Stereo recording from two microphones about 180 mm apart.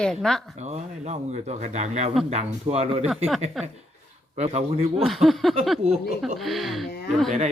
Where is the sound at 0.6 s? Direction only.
40° right (ahead or behind).